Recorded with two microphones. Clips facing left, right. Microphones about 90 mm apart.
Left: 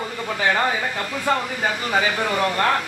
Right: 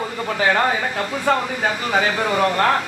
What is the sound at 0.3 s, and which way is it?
Speech, 5° right (ahead or behind).